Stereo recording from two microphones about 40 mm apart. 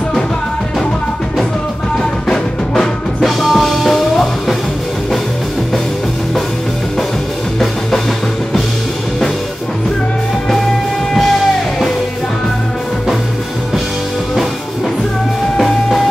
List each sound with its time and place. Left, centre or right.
2.2 s music: centre
3.2 s music: centre
15.5 s music: centre